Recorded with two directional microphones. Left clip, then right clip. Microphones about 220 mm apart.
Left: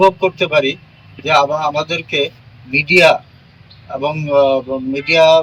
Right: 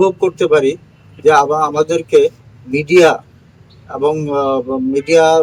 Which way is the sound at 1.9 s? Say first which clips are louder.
Right 7 dB; 10° right (ahead or behind).